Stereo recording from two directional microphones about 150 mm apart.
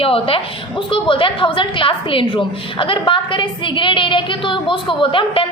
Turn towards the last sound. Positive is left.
turn(degrees=35)  # may be behind; listen again after turning